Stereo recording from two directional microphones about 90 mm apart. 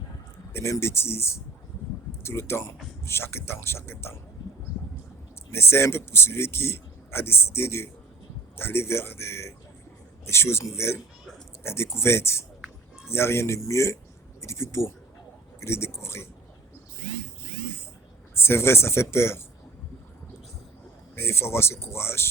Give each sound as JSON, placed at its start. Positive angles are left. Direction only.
{"t": 0.5, "sound": "a man's voice", "side_deg": 30}
{"t": 5.5, "sound": "a man's voice", "side_deg": 30}
{"t": 18.3, "sound": "a man's voice", "side_deg": 25}
{"t": 21.2, "sound": "a man's voice", "side_deg": 30}